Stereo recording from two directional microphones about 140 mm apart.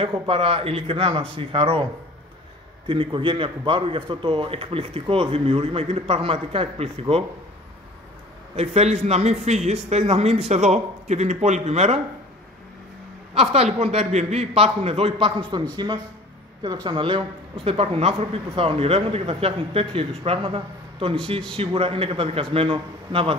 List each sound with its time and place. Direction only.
0.0 s a man's voice: 40° right (ahead or behind)
2.9 s speech: 35° right (ahead or behind)
8.5 s a man's voice: 50° right (ahead or behind)
13.3 s a man's voice: 45° right (ahead or behind)
15.7 s speech: 30° right (ahead or behind)